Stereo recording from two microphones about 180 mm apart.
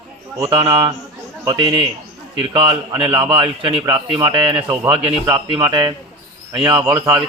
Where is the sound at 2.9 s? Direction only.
20° right (ahead or behind).